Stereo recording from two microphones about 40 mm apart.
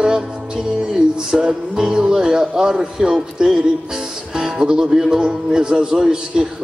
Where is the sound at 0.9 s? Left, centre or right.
Centre.